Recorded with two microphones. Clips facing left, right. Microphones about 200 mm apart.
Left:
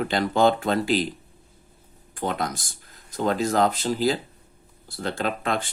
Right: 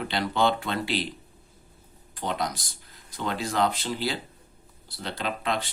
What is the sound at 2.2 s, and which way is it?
Speech, 50° left (ahead or behind).